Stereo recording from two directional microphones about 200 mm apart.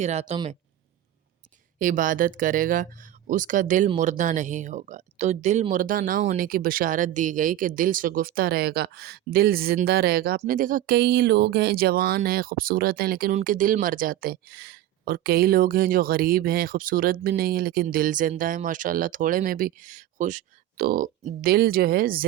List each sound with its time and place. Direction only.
0.0 s speech: 35° right (ahead or behind)
1.8 s speech: 40° right (ahead or behind)